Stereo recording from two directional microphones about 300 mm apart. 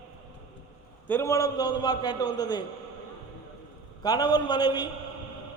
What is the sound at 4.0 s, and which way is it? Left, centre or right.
Speech, centre.